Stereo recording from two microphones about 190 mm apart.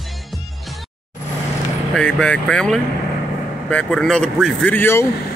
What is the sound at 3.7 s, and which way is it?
Speech, 5° left (ahead or behind).